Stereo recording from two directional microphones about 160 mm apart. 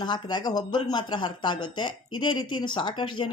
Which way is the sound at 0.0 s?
25° left (ahead or behind).